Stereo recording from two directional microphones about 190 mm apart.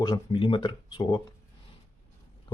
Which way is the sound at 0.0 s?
25° left (ahead or behind).